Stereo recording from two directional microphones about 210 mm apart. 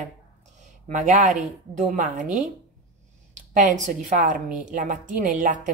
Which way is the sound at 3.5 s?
35° right (ahead or behind).